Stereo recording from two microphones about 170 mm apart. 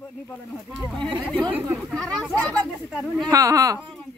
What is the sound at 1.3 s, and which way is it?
Speech, 5° left (ahead or behind).